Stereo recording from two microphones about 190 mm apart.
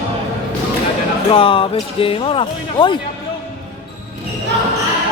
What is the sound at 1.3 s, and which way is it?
Speech, 30° left (ahead or behind).